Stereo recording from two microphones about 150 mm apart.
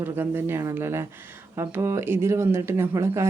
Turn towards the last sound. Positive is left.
turn(degrees=-20)  # may be behind; listen again after turning